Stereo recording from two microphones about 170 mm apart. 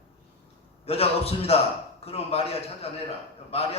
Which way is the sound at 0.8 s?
35° left (ahead or behind).